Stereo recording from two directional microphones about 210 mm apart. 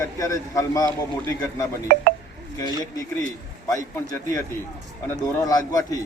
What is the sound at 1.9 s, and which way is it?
Speech, 50° right (ahead or behind).